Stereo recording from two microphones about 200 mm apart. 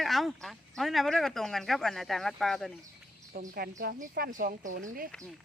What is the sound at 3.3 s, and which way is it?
Speech, 50° right (ahead or behind).